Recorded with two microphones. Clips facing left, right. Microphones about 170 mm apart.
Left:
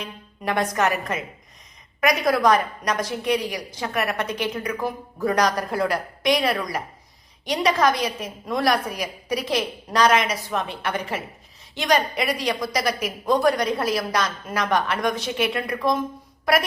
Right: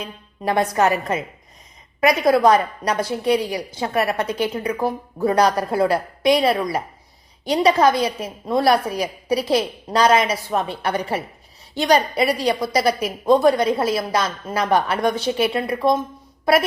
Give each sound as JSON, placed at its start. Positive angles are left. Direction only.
{"t": 0.0, "sound": "a woman's voice", "side_deg": -30}